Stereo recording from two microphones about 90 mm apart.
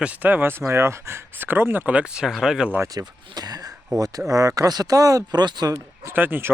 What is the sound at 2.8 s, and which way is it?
Speech, 45° right (ahead or behind).